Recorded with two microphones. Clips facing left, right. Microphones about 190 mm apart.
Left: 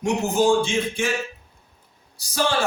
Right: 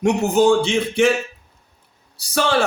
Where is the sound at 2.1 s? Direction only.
65° right (ahead or behind).